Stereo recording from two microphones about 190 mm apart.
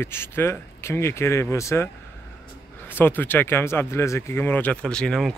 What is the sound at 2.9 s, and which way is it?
Speech, 10° left (ahead or behind).